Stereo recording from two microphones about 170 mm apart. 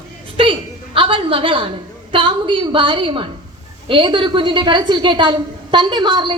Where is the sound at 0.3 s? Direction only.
30° right (ahead or behind).